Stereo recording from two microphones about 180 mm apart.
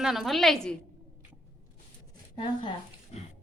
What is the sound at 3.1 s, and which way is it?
Music, 35° left (ahead or behind).